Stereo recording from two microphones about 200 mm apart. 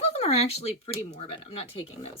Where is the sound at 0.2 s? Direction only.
30° left (ahead or behind).